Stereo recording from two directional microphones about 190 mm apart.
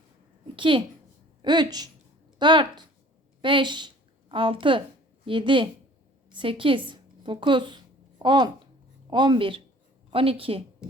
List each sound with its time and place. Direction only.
0.5 s a woman's voice: 25° right (ahead or behind)